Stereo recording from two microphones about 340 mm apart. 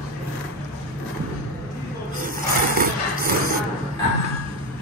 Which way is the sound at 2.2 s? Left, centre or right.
Right.